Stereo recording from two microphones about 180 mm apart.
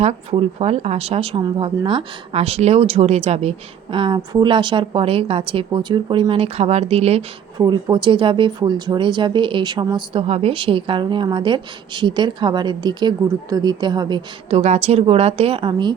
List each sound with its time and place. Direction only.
0.0 s speech: 35° right (ahead or behind)
7.6 s speech: 20° right (ahead or behind)
14.6 s speech: 35° right (ahead or behind)